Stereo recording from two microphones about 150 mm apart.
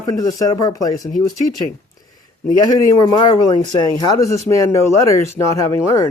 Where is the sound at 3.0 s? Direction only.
25° left (ahead or behind).